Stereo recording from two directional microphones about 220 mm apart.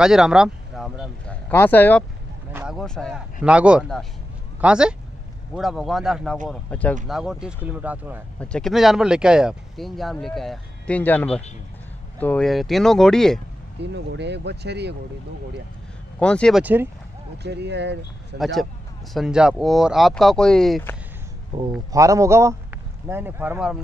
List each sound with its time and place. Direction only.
0.0 s speech: 5° right (ahead or behind)
2.5 s speech: 5° right (ahead or behind)
8.4 s speech: 5° left (ahead or behind)
13.7 s speech: 50° right (ahead or behind)
16.2 s speech: 5° left (ahead or behind)
16.6 s speech: 10° right (ahead or behind)
17.4 s speech: 50° right (ahead or behind)
18.4 s speech: centre (ahead or behind)
21.5 s a man's voice: 25° right (ahead or behind); by 23.8 s 5° right (ahead or behind)